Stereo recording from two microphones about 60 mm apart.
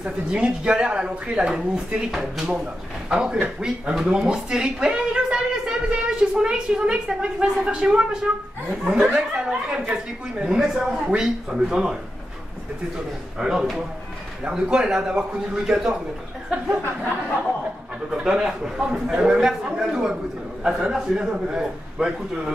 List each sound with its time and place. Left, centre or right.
0.0 s a woman's voice: centre
9.3 s speech: centre
13.4 s speech: centre
16.4 s a sound: right
18.2 s speech: centre